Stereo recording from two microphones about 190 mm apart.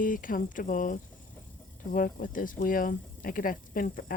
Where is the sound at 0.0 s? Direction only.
45° left (ahead or behind).